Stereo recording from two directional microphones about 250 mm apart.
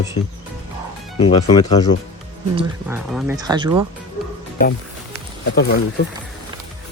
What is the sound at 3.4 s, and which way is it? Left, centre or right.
Speech, centre.